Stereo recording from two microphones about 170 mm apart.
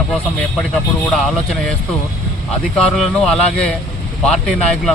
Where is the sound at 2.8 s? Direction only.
Centre (ahead or behind).